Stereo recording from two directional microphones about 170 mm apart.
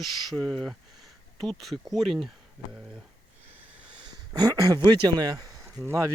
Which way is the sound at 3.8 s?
30° right (ahead or behind).